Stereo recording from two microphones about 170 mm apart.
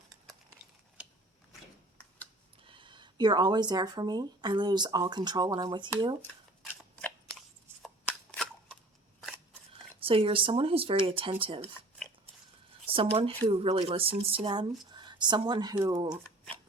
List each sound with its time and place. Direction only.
2.6 s speech: 30° right (ahead or behind)
6.6 s scissors: 5° left (ahead or behind)
10.0 s speech: 30° right (ahead or behind)
12.9 s speech: 35° right (ahead or behind)